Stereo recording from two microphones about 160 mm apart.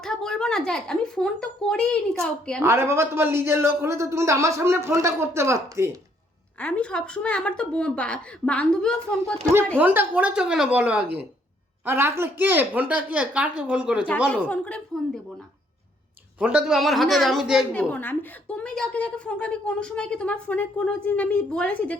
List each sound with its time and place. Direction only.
0.0 s speech: 5° left (ahead or behind)
2.6 s a man's voice: 15° right (ahead or behind)
6.6 s a woman's voice: 10° left (ahead or behind)
9.7 s a man's voice: 10° right (ahead or behind)
14.4 s a woman's voice: 5° left (ahead or behind)
16.4 s speech: 5° right (ahead or behind)
17.7 s a woman's voice: 10° left (ahead or behind)